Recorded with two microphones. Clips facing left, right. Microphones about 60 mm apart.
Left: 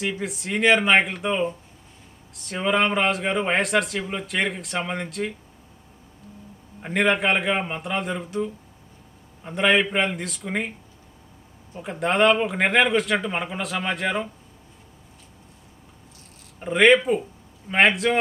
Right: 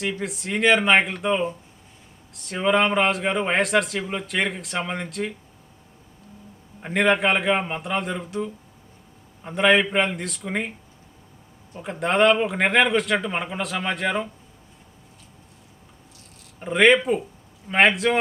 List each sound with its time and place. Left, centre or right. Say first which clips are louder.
0.0 s a man's voice: even; centre
6.8 s a man's voice: right 1 dB; centre
16.6 s a man's voice: even; centre